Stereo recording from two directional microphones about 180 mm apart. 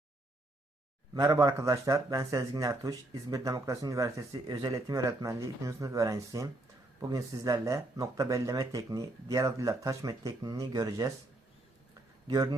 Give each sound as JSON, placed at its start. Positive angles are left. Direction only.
{"t": 1.1, "sound": "speech", "side_deg": -20}
{"t": 12.3, "sound": "speech", "side_deg": -20}